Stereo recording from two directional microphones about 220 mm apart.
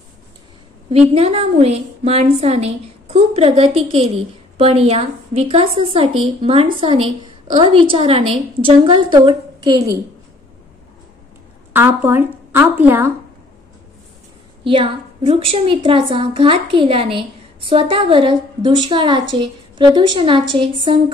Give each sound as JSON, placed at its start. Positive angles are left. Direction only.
{"t": 0.9, "sound": "a woman's voice", "side_deg": -30}
{"t": 11.7, "sound": "speech", "side_deg": -10}
{"t": 14.6, "sound": "a woman's voice", "side_deg": -25}